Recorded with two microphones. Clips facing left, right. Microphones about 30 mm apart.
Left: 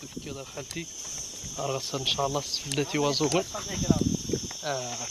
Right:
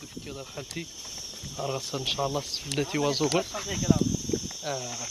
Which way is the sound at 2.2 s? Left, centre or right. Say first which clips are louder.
Left 1 dB; right.